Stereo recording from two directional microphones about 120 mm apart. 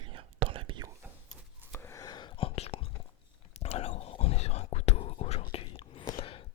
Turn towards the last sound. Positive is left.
turn(degrees=50)  # may be behind; listen again after turning